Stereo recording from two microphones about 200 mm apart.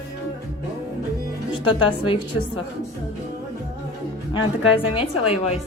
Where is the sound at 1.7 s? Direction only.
25° left (ahead or behind).